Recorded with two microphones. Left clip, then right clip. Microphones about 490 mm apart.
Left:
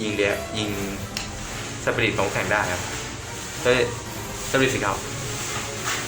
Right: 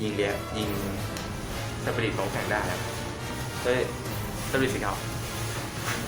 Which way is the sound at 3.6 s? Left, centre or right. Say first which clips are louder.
Left 7 dB; right.